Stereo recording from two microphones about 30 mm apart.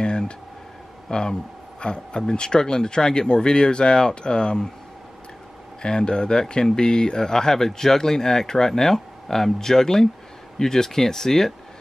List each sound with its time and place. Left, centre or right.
0.0 s a sound: left
1.1 s speech: left
5.8 s speech: left; by 11.5 s centre